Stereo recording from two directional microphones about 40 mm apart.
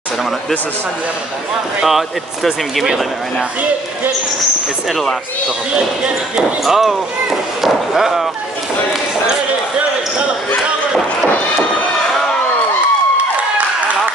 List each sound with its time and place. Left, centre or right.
1.9 s speech: centre
5.7 s speech: right
6.6 s speech: centre